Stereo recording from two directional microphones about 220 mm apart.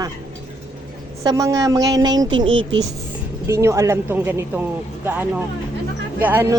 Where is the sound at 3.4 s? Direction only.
15° right (ahead or behind).